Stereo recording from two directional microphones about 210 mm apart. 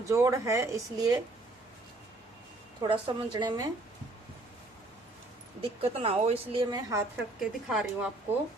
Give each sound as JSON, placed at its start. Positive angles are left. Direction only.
{"t": 0.0, "sound": "speech", "side_deg": -15}
{"t": 2.8, "sound": "a woman's voice", "side_deg": -20}
{"t": 5.8, "sound": "a woman's voice", "side_deg": -30}
{"t": 7.3, "sound": "speech", "side_deg": -5}